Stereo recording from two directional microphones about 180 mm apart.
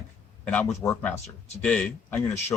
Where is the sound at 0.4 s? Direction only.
5° left (ahead or behind).